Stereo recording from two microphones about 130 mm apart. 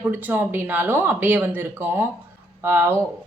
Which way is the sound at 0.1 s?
15° right (ahead or behind).